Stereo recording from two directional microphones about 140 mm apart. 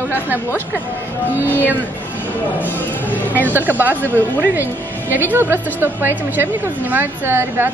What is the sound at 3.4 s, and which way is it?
Speech, 10° right (ahead or behind).